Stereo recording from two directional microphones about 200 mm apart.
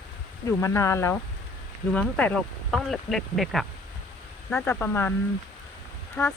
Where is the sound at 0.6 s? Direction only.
15° left (ahead or behind).